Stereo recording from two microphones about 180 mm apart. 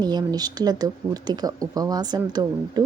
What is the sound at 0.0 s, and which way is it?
A woman's voice, 25° right (ahead or behind).